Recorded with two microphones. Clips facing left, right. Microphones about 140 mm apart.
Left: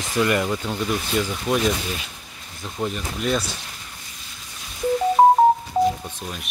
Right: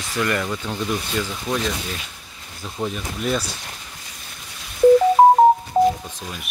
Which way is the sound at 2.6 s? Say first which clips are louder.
Even; centre (ahead or behind).